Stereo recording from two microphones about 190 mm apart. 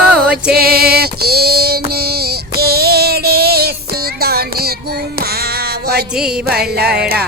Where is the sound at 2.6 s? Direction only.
55° right (ahead or behind).